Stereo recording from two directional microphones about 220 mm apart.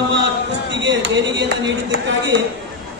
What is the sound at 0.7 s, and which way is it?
Speech, 55° right (ahead or behind).